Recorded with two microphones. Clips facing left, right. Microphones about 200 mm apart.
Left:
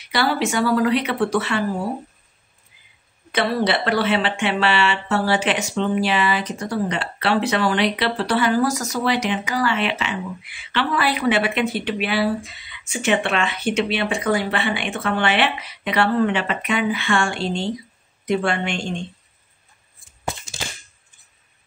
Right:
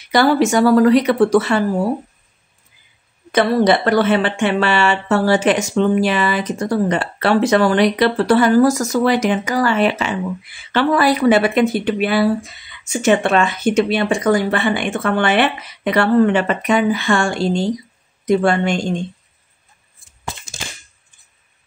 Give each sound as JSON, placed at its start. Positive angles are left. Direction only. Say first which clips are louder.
{"t": 0.1, "sound": "speech", "louder": "right 7 dB", "side_deg": -45}
{"t": 3.3, "sound": "a woman's voice", "louder": "right 7 dB", "side_deg": -45}